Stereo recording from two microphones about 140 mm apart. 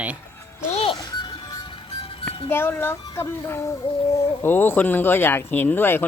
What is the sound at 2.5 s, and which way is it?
Speech, 15° left (ahead or behind).